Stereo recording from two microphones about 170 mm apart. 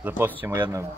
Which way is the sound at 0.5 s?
20° right (ahead or behind).